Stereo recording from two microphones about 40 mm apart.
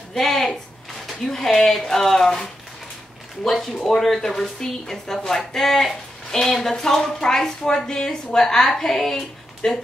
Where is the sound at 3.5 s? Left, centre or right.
Centre.